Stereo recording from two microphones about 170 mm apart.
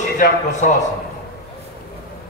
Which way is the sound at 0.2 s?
60° left (ahead or behind).